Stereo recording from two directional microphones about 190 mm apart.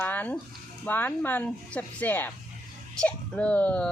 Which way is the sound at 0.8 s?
10° left (ahead or behind).